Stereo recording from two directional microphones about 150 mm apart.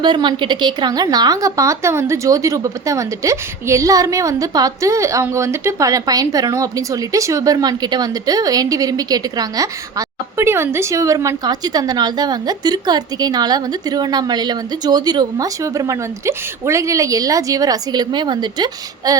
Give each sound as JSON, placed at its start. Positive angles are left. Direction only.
{"t": 0.0, "sound": "a woman's voice", "side_deg": -30}